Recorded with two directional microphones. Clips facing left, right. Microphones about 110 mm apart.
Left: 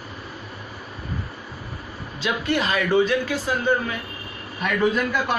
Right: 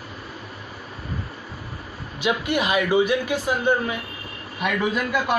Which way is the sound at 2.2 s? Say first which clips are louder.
Right 1 dB; 15° right (ahead or behind).